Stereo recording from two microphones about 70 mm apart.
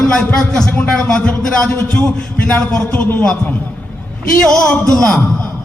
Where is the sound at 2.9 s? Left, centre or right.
Left.